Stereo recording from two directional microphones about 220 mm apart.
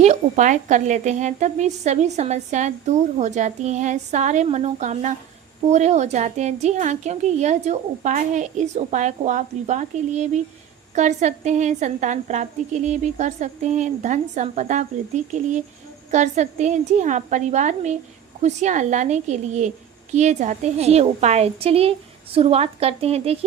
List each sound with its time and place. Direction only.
0.0 s a woman's voice: 30° right (ahead or behind)